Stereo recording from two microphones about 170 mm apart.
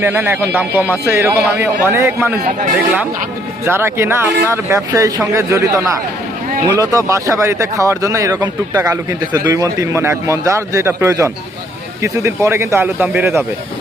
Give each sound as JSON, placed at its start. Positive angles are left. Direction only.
{"t": 0.0, "sound": "speech", "side_deg": -10}
{"t": 3.7, "sound": "speech", "side_deg": -15}